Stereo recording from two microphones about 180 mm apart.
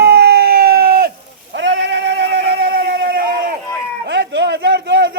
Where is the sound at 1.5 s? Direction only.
85° right; by 3.6 s 55° right (ahead or behind).